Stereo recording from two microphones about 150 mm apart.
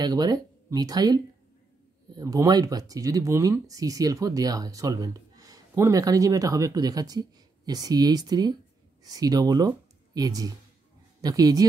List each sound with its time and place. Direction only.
0.0 s speech: 25° right (ahead or behind)